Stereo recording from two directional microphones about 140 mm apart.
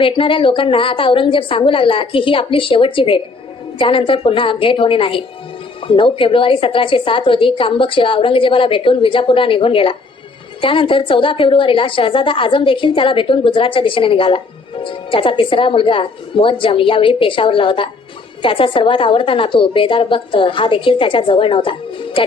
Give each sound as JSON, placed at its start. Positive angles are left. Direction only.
{"t": 0.0, "sound": "a woman's voice", "side_deg": 40}